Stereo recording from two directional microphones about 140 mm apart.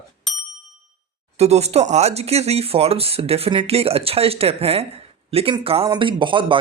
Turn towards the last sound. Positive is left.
turn(degrees=-35)  # may be behind; listen again after turning